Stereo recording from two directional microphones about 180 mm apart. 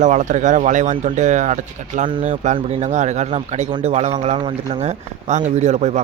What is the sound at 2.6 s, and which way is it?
Speech, 35° right (ahead or behind).